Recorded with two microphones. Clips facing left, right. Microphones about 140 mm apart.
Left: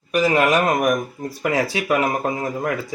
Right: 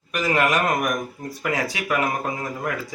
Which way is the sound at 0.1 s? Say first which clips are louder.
Left 4 dB; 30° left (ahead or behind).